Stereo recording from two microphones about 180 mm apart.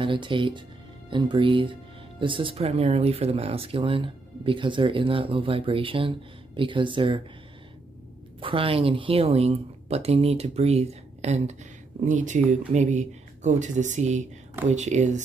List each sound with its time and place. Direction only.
0.0 s speech: 30° right (ahead or behind)
8.4 s a woman's voice: 30° right (ahead or behind)